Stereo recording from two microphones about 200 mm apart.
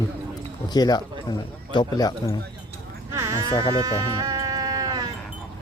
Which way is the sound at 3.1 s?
15° right (ahead or behind).